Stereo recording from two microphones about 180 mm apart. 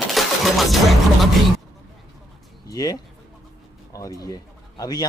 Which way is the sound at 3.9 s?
20° left (ahead or behind).